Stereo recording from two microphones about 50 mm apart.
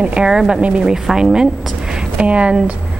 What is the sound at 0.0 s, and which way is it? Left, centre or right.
Speech, centre.